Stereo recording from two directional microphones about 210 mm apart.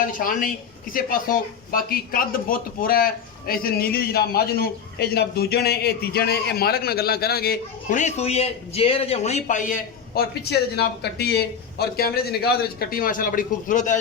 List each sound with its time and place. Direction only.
0.2 s a man's voice: 40° left (ahead or behind)
10.2 s a man's voice: 50° left (ahead or behind)